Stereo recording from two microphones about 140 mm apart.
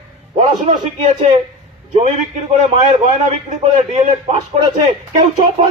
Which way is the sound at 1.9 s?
55° right (ahead or behind).